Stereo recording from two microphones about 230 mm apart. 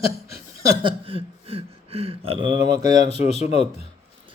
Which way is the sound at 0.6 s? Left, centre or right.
Right.